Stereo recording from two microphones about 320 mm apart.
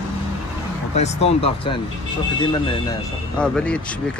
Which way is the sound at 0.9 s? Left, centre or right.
Left.